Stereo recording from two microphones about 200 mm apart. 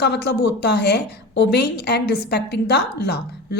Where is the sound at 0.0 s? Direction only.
55° left (ahead or behind).